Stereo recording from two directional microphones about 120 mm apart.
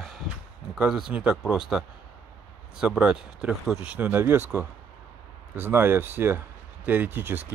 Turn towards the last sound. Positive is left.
turn(degrees=-15)  # may be behind; listen again after turning